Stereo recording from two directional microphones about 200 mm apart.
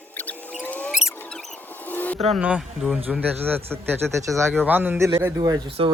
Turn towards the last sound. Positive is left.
turn(degrees=-25)  # may be behind; listen again after turning